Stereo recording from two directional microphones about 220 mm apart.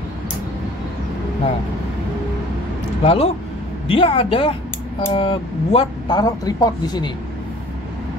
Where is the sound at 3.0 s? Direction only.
25° left (ahead or behind).